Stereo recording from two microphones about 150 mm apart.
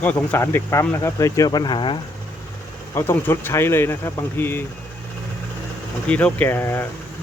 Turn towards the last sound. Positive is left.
turn(degrees=15)  # may be behind; listen again after turning